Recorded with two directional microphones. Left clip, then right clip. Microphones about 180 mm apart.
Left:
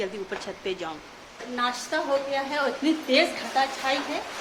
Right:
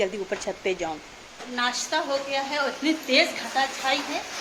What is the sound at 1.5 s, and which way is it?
A woman's voice, 5° left (ahead or behind).